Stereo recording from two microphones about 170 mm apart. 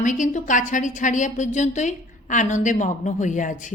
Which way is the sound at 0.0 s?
50° left (ahead or behind).